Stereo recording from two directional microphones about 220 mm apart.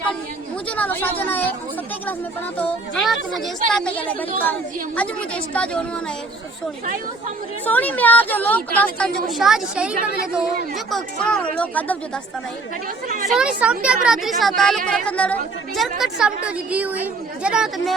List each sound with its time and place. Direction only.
0.8 s a woman's voice: 10° left (ahead or behind)
2.6 s a woman's voice: centre (ahead or behind)
7.6 s a woman's voice: 5° left (ahead or behind)
10.9 s a woman's voice: 5° left (ahead or behind)
13.1 s speech: 40° right (ahead or behind)
13.3 s a woman's voice: 5° right (ahead or behind)